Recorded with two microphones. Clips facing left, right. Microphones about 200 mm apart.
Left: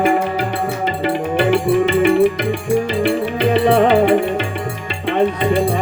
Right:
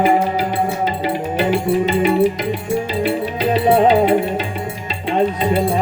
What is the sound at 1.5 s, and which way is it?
Music, 65° left (ahead or behind).